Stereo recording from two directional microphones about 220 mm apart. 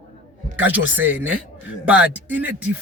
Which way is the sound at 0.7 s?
10° right (ahead or behind).